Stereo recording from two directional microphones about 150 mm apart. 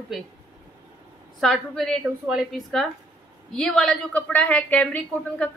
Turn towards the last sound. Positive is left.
turn(degrees=10)  # may be behind; listen again after turning